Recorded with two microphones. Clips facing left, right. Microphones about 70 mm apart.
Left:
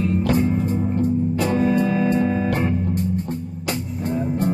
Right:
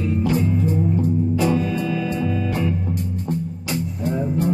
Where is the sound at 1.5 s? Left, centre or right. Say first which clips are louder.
Left 4 dB; left.